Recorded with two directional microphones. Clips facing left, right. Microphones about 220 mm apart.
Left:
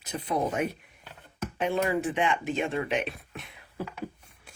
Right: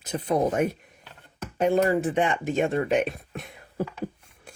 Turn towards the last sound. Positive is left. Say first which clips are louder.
# right 6 dB
turn(degrees=-45)  # may be behind; listen again after turning